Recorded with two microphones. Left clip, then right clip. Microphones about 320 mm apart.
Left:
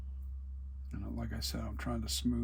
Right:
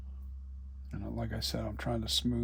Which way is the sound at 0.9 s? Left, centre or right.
Right.